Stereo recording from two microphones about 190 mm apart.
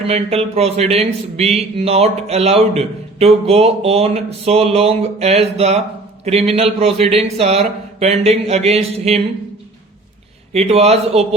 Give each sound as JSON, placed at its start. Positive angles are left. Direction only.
{"t": 0.0, "sound": "speech", "side_deg": -30}
{"t": 10.5, "sound": "speech", "side_deg": -35}